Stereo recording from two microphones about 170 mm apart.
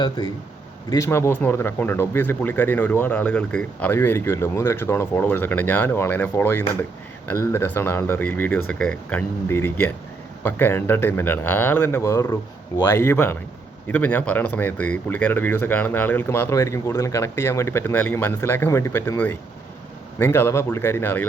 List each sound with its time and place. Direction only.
0.9 s speech: 15° left (ahead or behind)